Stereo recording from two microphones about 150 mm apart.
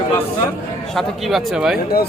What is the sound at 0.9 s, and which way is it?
Speech, centre (ahead or behind).